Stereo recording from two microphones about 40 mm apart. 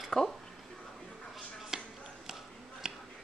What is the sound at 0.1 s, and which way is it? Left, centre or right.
Speech, centre.